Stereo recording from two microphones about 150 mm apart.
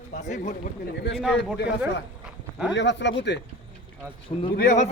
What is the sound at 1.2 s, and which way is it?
Speech, centre (ahead or behind).